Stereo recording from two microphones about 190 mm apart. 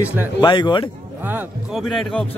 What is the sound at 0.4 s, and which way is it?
Speech, 25° left (ahead or behind).